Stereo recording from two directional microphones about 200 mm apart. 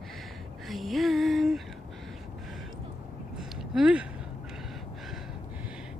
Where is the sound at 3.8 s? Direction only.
5° right (ahead or behind).